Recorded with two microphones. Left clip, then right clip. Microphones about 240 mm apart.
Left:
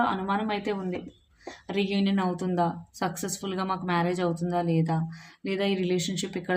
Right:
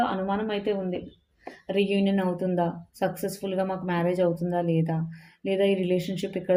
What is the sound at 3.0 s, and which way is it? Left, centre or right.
Speech, centre.